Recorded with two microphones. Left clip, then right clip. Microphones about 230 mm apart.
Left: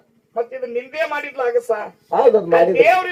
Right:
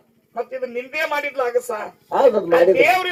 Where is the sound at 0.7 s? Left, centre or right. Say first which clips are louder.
Left 1 dB; right.